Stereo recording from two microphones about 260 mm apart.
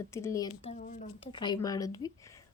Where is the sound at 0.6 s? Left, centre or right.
Left.